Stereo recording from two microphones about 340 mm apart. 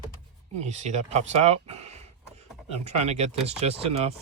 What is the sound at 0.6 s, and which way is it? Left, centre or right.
Speech, centre.